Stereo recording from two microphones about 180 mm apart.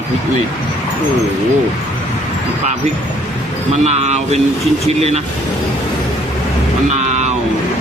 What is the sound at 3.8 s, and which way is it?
Speech, 35° right (ahead or behind).